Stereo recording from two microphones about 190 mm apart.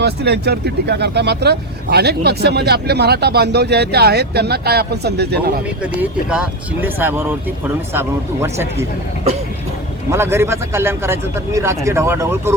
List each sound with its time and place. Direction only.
0.0 s speech: 60° right (ahead or behind)
6.0 s a man's voice: 5° right (ahead or behind)
10.1 s a man's voice: 15° right (ahead or behind)